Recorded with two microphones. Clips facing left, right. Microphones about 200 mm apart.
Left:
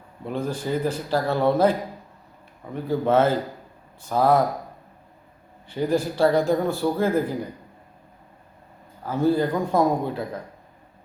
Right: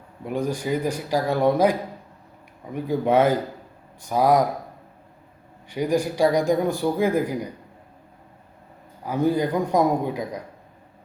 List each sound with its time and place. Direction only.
0.3 s a man's voice: 15° right (ahead or behind)
2.7 s a man's voice: 15° right (ahead or behind)
5.6 s a man's voice: 15° right (ahead or behind)
9.0 s a man's voice: 15° right (ahead or behind)